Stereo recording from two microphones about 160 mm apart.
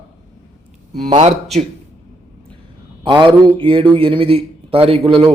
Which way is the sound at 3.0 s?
30° right (ahead or behind).